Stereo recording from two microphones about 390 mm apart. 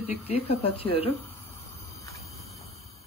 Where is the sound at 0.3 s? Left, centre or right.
Centre.